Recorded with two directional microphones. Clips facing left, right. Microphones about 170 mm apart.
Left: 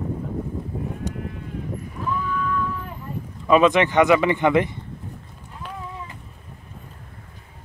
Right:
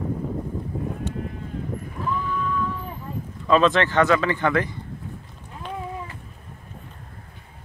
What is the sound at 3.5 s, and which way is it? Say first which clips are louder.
A man's voice: left 2 dB; 15° left (ahead or behind).